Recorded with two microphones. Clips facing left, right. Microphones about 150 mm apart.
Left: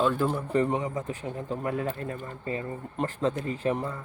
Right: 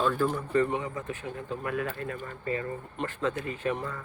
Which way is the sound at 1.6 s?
30° left (ahead or behind).